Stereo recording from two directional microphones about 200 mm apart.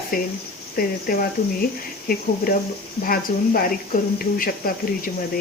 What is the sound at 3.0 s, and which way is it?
A woman's voice, 45° left (ahead or behind).